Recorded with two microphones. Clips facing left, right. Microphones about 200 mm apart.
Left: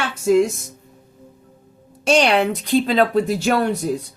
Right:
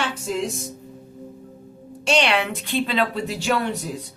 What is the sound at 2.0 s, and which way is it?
A woman's voice, 45° left (ahead or behind).